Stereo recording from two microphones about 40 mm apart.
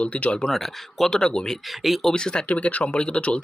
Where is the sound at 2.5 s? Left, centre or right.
Left.